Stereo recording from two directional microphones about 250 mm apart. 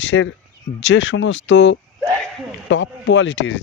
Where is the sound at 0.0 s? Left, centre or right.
Left.